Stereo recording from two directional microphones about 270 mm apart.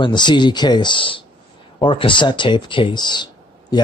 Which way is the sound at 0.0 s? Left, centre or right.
Centre.